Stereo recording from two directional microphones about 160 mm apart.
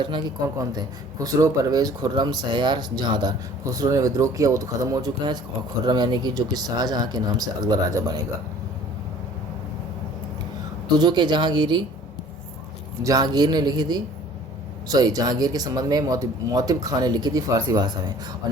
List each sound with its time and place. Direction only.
0.6 s speech: 25° right (ahead or behind)
10.8 s speech: 25° right (ahead or behind)
13.0 s speech: 20° right (ahead or behind)